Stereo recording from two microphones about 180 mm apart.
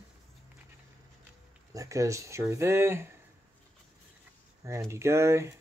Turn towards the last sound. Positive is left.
turn(degrees=-15)  # may be behind; listen again after turning